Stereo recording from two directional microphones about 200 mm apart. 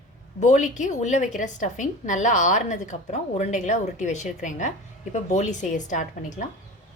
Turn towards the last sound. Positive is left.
turn(degrees=40)  # may be behind; listen again after turning